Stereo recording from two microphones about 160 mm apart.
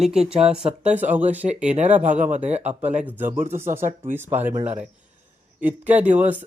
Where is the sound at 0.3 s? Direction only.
40° right (ahead or behind).